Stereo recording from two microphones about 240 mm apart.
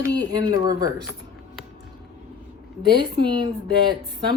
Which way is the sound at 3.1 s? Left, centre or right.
Centre.